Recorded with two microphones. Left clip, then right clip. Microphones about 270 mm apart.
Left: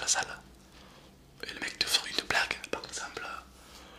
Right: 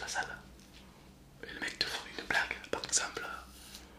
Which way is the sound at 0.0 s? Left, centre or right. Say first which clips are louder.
Left 6 dB; centre.